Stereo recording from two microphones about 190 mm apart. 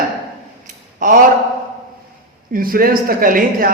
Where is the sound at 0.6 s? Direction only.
45° right (ahead or behind).